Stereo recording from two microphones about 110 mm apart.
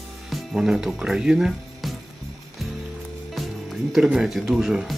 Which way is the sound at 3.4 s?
Centre (ahead or behind).